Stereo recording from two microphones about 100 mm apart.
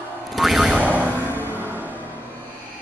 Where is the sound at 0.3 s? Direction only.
Centre (ahead or behind).